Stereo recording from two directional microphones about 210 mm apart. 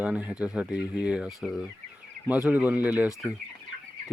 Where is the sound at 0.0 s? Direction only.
5° right (ahead or behind).